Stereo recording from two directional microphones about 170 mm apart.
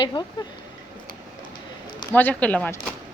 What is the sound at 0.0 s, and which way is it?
Speech, 25° left (ahead or behind).